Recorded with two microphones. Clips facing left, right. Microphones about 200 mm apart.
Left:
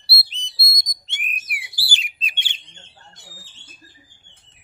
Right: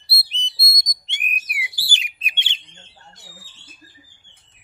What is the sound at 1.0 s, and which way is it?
Bird, 20° right (ahead or behind).